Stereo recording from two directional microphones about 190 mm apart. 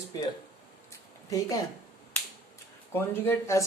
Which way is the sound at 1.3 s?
20° left (ahead or behind).